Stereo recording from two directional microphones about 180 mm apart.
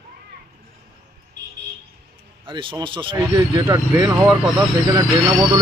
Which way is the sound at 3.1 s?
15° right (ahead or behind).